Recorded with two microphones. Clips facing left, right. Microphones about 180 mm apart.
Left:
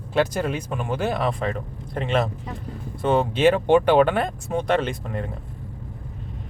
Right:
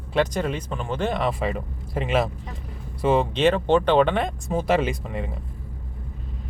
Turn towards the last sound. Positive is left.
turn(degrees=0)  # may be behind; listen again after turning